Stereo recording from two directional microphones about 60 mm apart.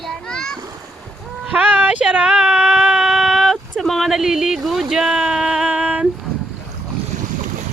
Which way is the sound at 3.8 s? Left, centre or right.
Centre.